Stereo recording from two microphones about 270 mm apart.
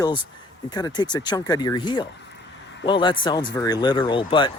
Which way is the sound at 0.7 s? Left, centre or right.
Centre.